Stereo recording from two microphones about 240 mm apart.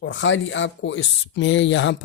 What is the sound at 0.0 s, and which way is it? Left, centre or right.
Speech, left.